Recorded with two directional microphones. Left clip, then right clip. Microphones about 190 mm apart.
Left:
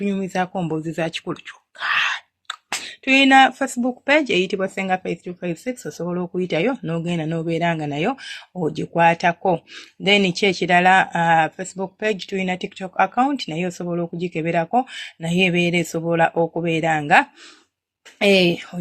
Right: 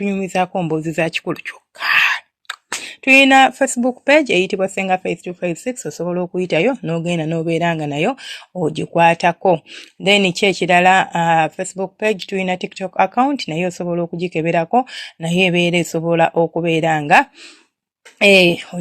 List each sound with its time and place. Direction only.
0.0 s speech: 35° right (ahead or behind)